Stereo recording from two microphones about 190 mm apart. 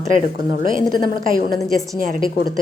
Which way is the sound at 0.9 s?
25° left (ahead or behind).